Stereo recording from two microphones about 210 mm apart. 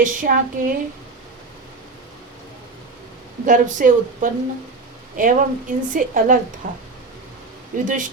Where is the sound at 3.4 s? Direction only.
40° right (ahead or behind).